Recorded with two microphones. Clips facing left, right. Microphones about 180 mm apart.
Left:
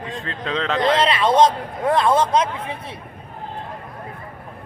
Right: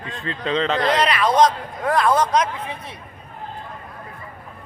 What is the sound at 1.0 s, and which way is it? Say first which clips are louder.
A man's voice: left 1 dB; 25° left (ahead or behind).